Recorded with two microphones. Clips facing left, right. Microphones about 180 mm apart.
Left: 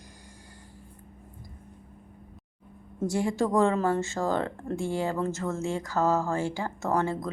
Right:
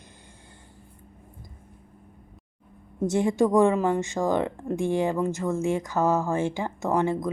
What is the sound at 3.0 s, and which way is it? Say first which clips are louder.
A woman's voice: right 4 dB; 20° right (ahead or behind).